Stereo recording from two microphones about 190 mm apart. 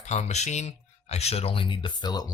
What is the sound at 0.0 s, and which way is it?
Speech, 35° left (ahead or behind).